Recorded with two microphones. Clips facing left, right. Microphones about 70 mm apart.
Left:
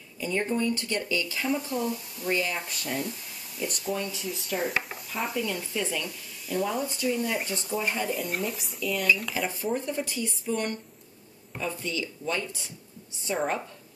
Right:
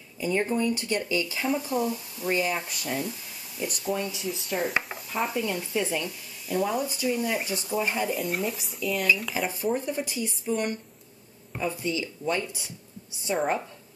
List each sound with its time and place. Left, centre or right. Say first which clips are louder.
0.2 s speech: right 2 dB; centre